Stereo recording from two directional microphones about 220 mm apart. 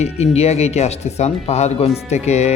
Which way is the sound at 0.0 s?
30° left (ahead or behind).